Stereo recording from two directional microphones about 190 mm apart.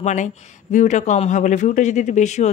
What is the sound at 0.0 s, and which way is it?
Speech, 40° left (ahead or behind).